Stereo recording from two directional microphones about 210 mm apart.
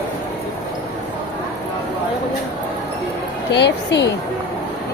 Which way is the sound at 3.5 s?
55° left (ahead or behind).